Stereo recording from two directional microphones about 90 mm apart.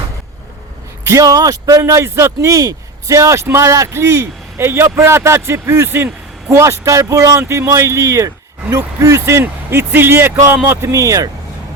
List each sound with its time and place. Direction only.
1.0 s speech: 35° right (ahead or behind)